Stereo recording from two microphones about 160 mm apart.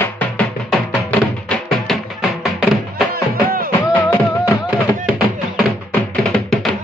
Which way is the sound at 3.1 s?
65° right (ahead or behind).